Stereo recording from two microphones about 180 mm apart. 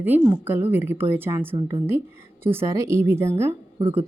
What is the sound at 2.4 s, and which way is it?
A woman's voice, 15° right (ahead or behind).